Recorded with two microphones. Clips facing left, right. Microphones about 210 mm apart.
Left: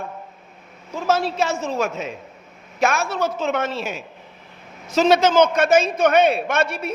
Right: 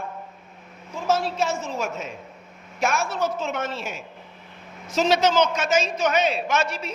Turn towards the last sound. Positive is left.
turn(degrees=55)  # may be behind; listen again after turning